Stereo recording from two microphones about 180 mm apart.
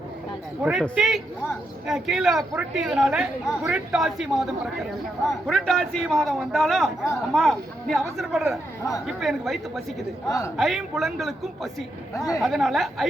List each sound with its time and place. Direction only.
0.6 s speech: 5° right (ahead or behind)
10.2 s a man's voice: 15° left (ahead or behind)
10.6 s speech: centre (ahead or behind)
12.1 s a man's voice: 20° left (ahead or behind)
12.4 s speech: centre (ahead or behind)